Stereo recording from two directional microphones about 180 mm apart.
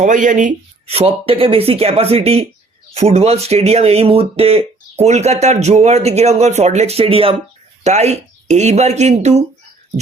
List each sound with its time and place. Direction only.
0.0 s speech: 45° right (ahead or behind)